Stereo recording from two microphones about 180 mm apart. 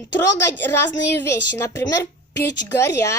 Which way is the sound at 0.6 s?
10° left (ahead or behind).